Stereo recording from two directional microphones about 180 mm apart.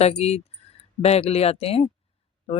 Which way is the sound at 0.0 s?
35° left (ahead or behind).